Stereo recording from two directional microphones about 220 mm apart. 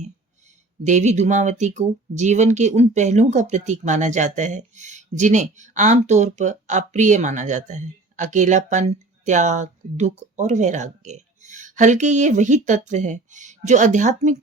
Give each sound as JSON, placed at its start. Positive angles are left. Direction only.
{"t": 0.9, "sound": "speech", "side_deg": -35}